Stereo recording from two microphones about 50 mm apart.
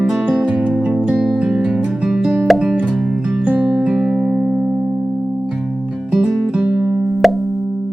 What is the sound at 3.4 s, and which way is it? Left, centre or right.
Music, right.